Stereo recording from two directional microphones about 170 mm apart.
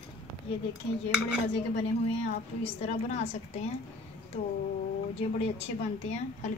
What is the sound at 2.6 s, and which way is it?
A woman's voice, 40° left (ahead or behind).